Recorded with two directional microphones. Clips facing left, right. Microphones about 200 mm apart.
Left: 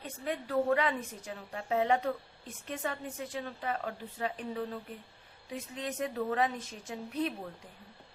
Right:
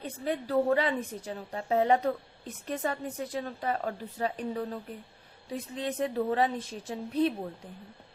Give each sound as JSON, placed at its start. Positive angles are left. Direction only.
{"t": 0.0, "sound": "a woman's voice", "side_deg": -35}